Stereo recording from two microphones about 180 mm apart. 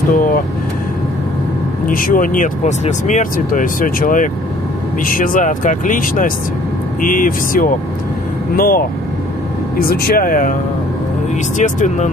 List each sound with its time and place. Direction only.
1.9 s speech: 50° left (ahead or behind)
11.5 s speech: 45° left (ahead or behind)